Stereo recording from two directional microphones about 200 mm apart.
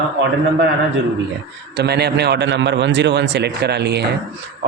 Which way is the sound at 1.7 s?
55° right (ahead or behind).